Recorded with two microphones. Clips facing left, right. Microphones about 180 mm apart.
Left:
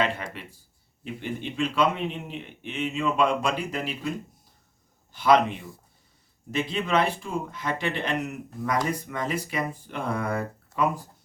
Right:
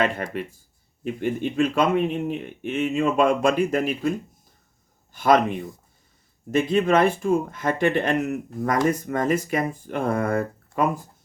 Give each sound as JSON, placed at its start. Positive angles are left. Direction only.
{"t": 0.0, "sound": "a man's voice", "side_deg": -50}
{"t": 5.1, "sound": "a man's voice", "side_deg": -45}